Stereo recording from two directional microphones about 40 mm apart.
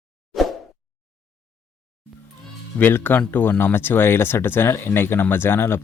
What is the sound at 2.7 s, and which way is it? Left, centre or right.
Speech, left.